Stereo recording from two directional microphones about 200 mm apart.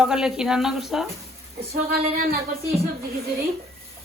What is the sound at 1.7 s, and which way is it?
Speech, 50° right (ahead or behind).